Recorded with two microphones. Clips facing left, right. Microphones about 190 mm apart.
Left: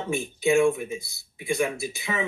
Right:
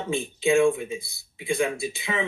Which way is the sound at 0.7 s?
30° right (ahead or behind).